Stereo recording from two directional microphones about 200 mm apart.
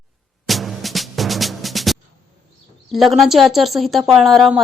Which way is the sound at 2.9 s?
Centre (ahead or behind).